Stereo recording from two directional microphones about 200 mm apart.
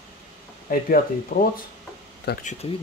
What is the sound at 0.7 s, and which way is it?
Speech, 45° left (ahead or behind).